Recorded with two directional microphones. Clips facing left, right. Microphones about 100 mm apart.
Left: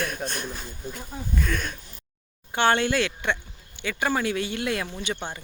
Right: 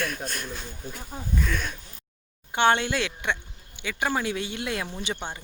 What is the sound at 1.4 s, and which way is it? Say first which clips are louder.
Speech: left 1 dB; centre (ahead or behind).